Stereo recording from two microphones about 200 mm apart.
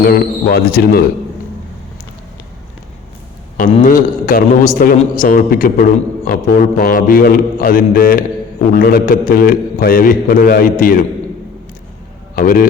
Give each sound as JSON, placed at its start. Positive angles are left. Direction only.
{"t": 0.0, "sound": "a man's voice", "side_deg": 50}
{"t": 3.6, "sound": "a man's voice", "side_deg": 45}
{"t": 12.4, "sound": "a man's voice", "side_deg": 45}